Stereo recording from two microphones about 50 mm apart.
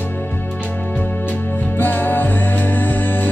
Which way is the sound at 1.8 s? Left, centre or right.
Left.